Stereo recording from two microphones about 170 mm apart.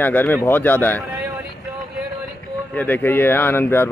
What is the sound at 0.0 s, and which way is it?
Speech, 10° left (ahead or behind).